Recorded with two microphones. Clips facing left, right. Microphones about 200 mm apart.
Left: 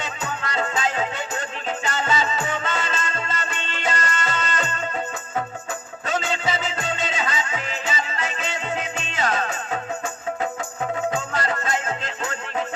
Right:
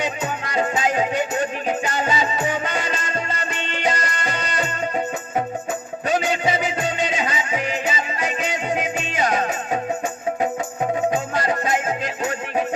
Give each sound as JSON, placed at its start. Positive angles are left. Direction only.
{"t": 0.0, "sound": "music", "side_deg": -15}
{"t": 6.1, "sound": "music", "side_deg": -15}
{"t": 11.1, "sound": "music", "side_deg": -20}